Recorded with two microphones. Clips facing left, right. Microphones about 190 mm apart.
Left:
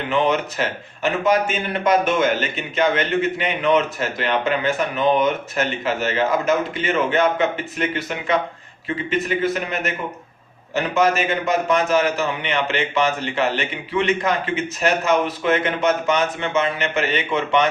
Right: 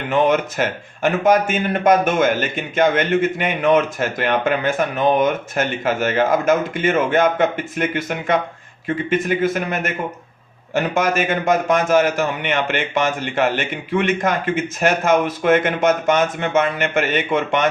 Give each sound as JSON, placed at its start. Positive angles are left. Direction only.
{"t": 0.1, "sound": "a man's voice", "side_deg": -50}